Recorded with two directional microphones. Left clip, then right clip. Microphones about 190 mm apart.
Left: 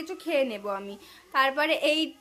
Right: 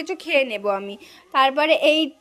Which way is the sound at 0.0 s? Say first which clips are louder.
Right 6 dB; 40° right (ahead or behind).